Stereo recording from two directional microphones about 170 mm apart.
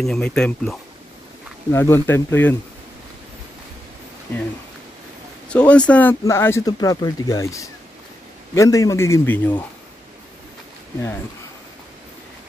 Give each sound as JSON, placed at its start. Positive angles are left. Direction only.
{"t": 0.0, "sound": "speech", "side_deg": 5}
{"t": 5.5, "sound": "speech", "side_deg": 5}